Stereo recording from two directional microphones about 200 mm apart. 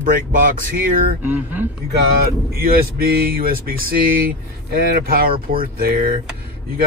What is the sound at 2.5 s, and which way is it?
Speech, 50° right (ahead or behind).